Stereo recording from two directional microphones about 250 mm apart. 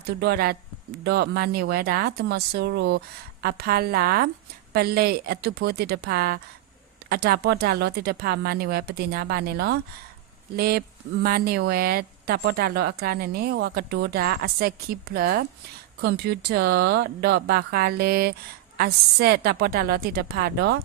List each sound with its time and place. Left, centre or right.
0.0 s speech: right